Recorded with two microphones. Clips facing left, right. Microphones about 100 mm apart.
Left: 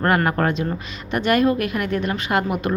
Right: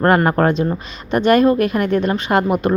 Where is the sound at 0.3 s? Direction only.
35° right (ahead or behind).